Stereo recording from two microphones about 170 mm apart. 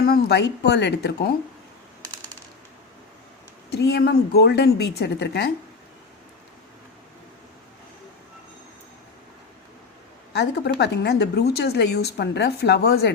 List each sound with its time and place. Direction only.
0.0 s speech: 70° left (ahead or behind); by 1.3 s 85° left
3.7 s a woman's voice: 75° left (ahead or behind)
10.3 s a woman's voice: 80° left